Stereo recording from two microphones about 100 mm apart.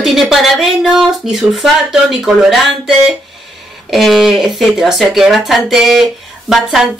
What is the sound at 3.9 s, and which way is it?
Speech, centre (ahead or behind).